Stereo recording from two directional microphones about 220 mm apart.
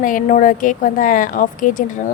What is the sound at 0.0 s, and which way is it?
Speech, 35° left (ahead or behind).